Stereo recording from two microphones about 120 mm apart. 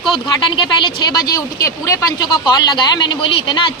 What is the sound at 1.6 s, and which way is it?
Speech, 30° left (ahead or behind).